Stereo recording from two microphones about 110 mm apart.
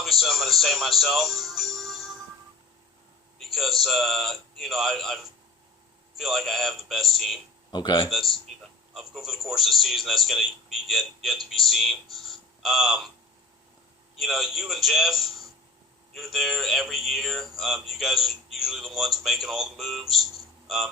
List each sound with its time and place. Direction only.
0.0 s speech: centre (ahead or behind)
3.3 s a sound: centre (ahead or behind)
3.8 s a man's voice: centre (ahead or behind)
7.7 s speech: 40° left (ahead or behind)
8.4 s a man's voice: centre (ahead or behind)
14.2 s a man's voice: centre (ahead or behind)